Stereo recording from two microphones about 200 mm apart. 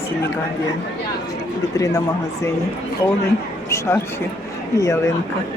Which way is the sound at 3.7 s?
15° left (ahead or behind).